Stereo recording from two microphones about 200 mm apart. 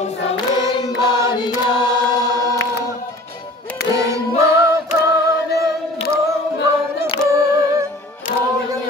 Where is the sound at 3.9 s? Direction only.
15° right (ahead or behind).